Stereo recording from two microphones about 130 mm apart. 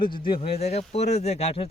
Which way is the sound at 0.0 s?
40° left (ahead or behind).